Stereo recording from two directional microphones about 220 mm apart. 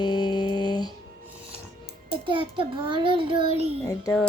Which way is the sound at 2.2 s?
25° right (ahead or behind).